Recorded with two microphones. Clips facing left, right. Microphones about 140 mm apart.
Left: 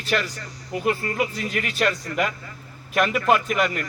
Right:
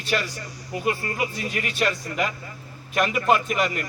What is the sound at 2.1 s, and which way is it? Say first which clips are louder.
Speech: left 2 dB; 20° right (ahead or behind).